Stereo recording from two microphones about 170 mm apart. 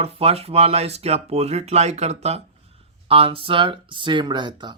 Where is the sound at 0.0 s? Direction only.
35° right (ahead or behind).